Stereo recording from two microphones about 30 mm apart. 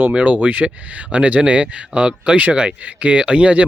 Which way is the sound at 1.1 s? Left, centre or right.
Right.